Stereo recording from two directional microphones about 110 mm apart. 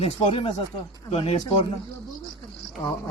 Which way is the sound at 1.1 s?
70° left (ahead or behind).